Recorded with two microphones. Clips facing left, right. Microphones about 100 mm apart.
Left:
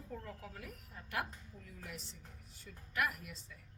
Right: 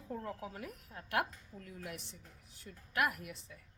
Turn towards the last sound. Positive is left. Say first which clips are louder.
# right 3 dB
turn(degrees=-65)  # may be behind; listen again after turning